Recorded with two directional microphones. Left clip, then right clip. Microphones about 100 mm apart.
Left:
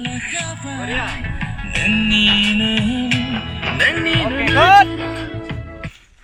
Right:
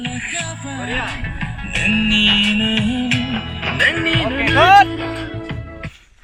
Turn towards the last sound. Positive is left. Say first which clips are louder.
# even
turn(degrees=-40)  # may be behind; listen again after turning